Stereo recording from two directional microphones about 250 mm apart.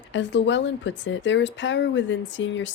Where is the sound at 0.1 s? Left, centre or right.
Left.